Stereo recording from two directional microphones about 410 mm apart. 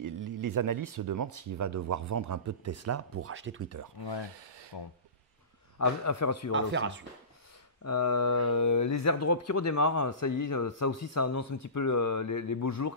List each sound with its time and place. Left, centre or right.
0.0 s speech: right
4.7 s speech: left
5.8 s a man's voice: left
6.5 s speech: right
7.8 s speech: left